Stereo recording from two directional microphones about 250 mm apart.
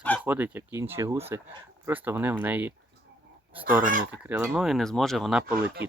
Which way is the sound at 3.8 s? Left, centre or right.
Right.